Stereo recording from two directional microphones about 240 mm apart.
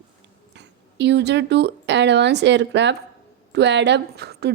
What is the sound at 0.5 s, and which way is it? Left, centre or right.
A woman's voice, right.